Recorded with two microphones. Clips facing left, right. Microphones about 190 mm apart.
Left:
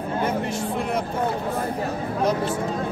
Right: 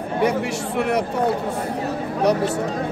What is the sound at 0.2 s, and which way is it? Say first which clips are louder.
Speech: right 6 dB; 70° right (ahead or behind).